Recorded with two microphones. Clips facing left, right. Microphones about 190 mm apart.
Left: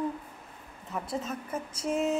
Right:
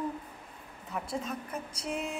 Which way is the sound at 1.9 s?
45° left (ahead or behind).